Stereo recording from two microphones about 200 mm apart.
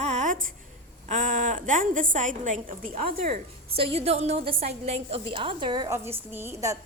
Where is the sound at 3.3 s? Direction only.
30° right (ahead or behind).